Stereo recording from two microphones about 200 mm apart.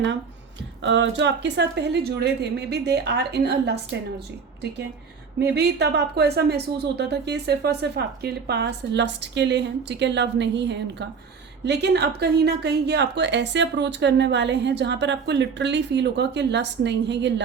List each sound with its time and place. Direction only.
0.8 s a woman's voice: 65° right (ahead or behind)
5.4 s a woman's voice: 55° right (ahead or behind)